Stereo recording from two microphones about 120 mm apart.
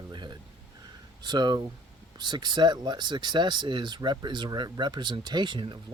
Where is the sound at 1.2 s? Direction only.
35° right (ahead or behind).